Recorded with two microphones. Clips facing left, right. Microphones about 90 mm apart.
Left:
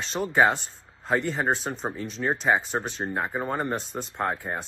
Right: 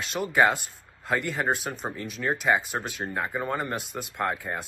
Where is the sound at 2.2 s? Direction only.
20° left (ahead or behind).